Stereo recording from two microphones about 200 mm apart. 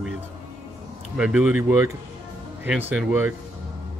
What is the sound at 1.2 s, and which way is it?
Speech, 5° right (ahead or behind).